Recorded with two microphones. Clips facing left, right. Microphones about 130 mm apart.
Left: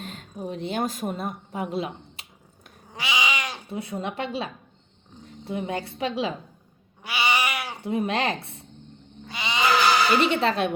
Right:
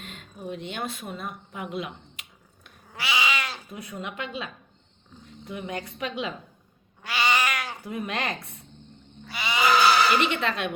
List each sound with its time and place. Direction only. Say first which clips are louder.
0.0 s a woman's voice: left 4 dB; 35° left (ahead or behind)
2.9 s cat: even; 20° left (ahead or behind)
3.7 s a woman's voice: left 6 dB; 30° left (ahead or behind)
7.0 s cat: even; 15° left (ahead or behind)
7.8 s speech: left 6 dB; 30° left (ahead or behind)
9.2 s a sound: even; 20° left (ahead or behind)
10.2 s a woman's voice: left 4 dB; 35° left (ahead or behind)